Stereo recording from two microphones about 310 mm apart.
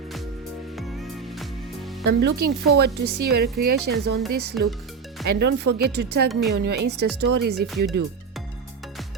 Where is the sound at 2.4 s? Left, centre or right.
Right.